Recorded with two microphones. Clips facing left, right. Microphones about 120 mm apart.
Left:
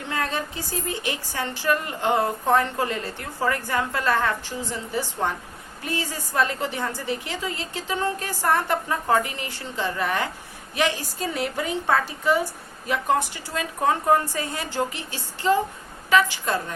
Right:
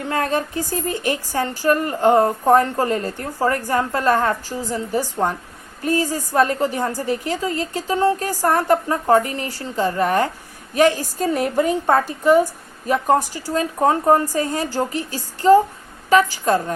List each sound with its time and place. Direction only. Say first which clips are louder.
0.1 s a woman's voice: right 6 dB; 45° right (ahead or behind)